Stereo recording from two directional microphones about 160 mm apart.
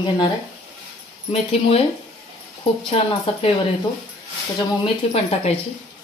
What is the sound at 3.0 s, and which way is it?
Speech, 35° left (ahead or behind).